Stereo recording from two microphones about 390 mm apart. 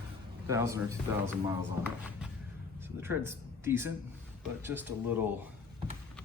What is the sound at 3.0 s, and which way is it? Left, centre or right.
Speech, centre.